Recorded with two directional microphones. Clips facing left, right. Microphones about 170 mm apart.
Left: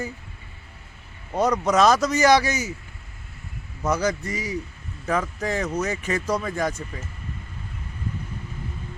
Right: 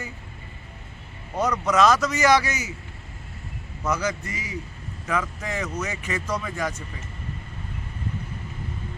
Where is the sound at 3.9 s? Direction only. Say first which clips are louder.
Left 3 dB; 35° left (ahead or behind).